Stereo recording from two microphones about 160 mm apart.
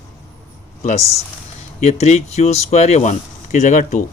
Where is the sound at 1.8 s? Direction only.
45° left (ahead or behind).